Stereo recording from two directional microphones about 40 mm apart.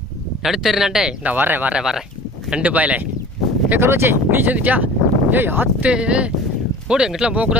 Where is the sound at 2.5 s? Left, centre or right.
Right.